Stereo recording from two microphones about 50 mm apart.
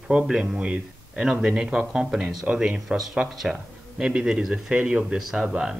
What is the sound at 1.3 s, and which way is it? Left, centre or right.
Speech, centre.